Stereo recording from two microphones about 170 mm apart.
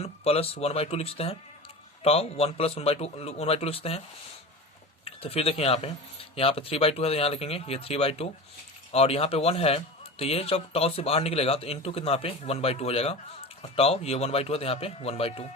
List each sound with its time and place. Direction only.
0.0 s a man's voice: 35° left (ahead or behind)
5.0 s a man's voice: 35° left (ahead or behind)